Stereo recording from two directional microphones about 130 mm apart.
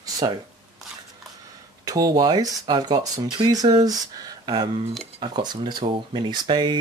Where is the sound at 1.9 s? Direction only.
30° right (ahead or behind).